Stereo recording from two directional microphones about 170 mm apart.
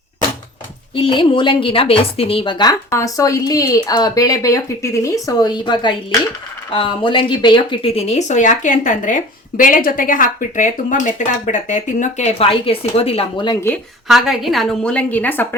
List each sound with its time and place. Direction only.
0.9 s a woman's voice: 30° left (ahead or behind)
14.1 s a woman's voice: centre (ahead or behind)